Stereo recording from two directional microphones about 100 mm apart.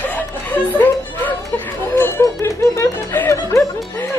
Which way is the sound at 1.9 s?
25° left (ahead or behind).